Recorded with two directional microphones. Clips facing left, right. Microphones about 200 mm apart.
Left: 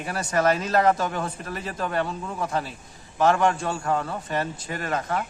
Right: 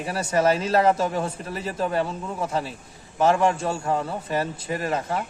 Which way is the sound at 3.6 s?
25° right (ahead or behind).